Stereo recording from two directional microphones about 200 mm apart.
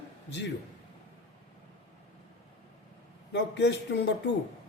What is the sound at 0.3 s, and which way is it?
Speech, 60° left (ahead or behind).